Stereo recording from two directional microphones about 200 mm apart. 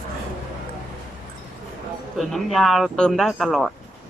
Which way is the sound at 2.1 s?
Centre (ahead or behind).